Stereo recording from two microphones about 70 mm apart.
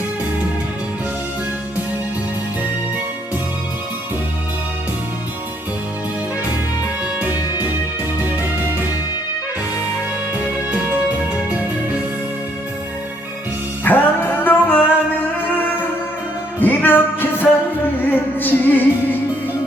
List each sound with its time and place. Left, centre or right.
13.8 s music: left
16.6 s music: left